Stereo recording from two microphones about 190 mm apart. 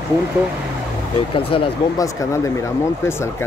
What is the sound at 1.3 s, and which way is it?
Speech, 30° left (ahead or behind).